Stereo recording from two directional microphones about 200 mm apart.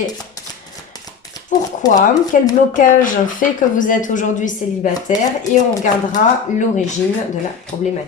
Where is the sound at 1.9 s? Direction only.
40° left (ahead or behind).